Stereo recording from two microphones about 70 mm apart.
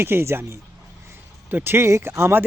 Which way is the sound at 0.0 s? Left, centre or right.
Right.